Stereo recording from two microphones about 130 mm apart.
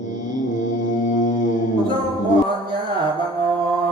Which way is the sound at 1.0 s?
80° left.